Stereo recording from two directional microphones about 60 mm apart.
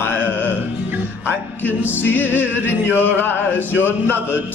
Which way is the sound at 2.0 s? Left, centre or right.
Left.